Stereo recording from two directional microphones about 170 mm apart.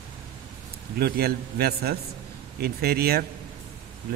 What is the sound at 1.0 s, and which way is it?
A man's voice, 65° right (ahead or behind).